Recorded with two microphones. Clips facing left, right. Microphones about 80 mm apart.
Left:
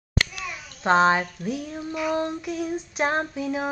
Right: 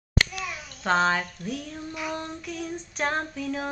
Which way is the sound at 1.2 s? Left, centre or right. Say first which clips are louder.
Left 4 dB; centre.